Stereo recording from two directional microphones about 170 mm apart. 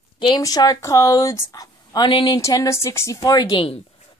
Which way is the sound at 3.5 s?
30° left (ahead or behind).